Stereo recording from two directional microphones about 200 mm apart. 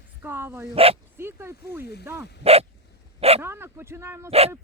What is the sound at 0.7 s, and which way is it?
Speech, 30° right (ahead or behind).